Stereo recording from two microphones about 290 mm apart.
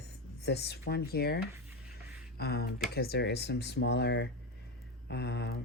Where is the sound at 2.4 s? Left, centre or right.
Left.